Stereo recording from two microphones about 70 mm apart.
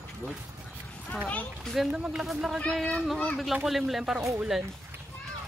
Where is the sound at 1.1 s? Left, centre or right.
Centre.